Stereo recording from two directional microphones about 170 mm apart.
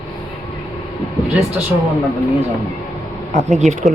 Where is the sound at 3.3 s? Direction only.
45° right (ahead or behind).